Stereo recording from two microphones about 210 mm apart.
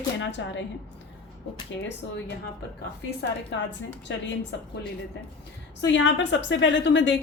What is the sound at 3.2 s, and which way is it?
Speech, 55° left (ahead or behind).